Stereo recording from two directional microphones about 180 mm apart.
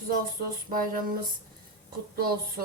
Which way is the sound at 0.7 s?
50° right (ahead or behind).